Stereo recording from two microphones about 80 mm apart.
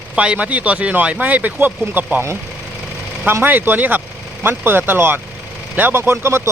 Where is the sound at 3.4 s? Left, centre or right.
Right.